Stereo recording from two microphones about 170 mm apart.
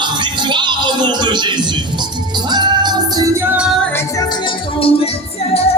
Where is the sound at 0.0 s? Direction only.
25° right (ahead or behind).